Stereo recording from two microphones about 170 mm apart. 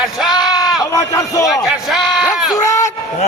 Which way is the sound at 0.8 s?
20° left (ahead or behind).